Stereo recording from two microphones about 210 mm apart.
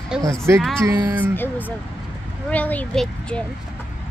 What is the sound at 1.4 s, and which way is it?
Speech, 10° left (ahead or behind).